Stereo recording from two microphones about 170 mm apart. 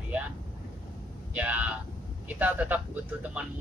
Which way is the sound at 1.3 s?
10° right (ahead or behind).